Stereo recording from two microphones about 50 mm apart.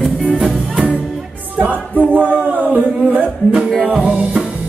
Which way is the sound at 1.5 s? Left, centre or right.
Right.